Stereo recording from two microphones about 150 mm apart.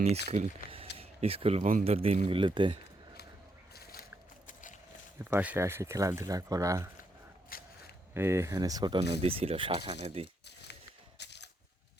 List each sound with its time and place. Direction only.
0.0 s speech: 45° right (ahead or behind)
3.8 s boat: 90° left
4.4 s a sound: 60° left (ahead or behind)
5.2 s speech: 10° right (ahead or behind)
7.5 s a sound: 75° left (ahead or behind)
8.1 s speech: 15° right (ahead or behind)
9.0 s speech: 40° right (ahead or behind)